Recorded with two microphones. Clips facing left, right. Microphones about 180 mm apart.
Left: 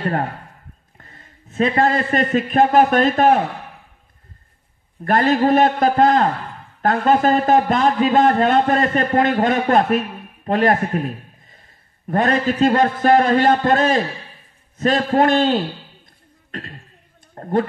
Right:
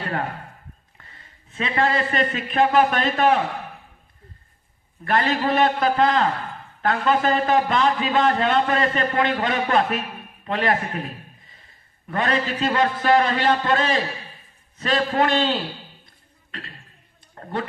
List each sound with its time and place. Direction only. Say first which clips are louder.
0.0 s a sound: left 5 dB; 45° left (ahead or behind)
0.9 s a man's voice: left 4 dB; 45° left (ahead or behind)
5.0 s a man's voice: left 6 dB; 45° left (ahead or behind)